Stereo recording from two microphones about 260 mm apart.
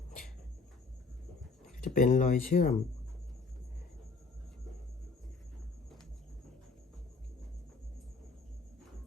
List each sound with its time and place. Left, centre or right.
1.8 s speech: left